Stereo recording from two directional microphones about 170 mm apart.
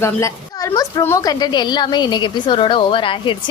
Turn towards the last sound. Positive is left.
turn(degrees=30)  # may be behind; listen again after turning